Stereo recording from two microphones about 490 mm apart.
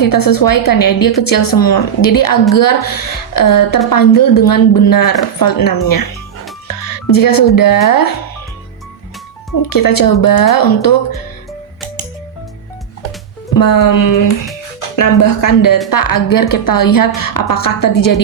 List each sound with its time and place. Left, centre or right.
0.0 s a woman's voice: left
9.6 s a woman's voice: left
13.5 s a woman's voice: left